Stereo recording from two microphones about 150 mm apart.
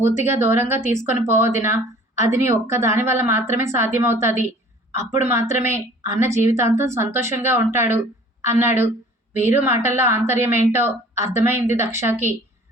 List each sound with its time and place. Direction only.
0.0 s a woman's voice: 20° right (ahead or behind)